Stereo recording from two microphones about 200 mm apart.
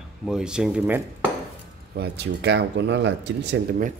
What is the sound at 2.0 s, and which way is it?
Speech, 60° right (ahead or behind).